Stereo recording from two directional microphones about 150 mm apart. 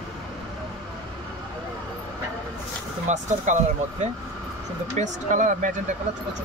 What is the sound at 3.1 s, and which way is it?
Speech, 50° right (ahead or behind).